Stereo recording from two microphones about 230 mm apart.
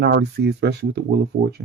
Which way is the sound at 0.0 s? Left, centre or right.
Right.